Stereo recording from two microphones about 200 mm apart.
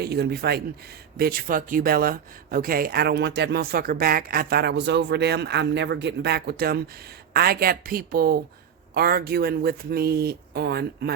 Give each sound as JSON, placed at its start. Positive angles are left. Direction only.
{"t": 0.0, "sound": "speech", "side_deg": -55}